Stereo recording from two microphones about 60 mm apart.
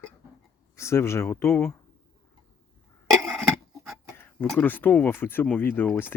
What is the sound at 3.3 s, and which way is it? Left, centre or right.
Dog, centre.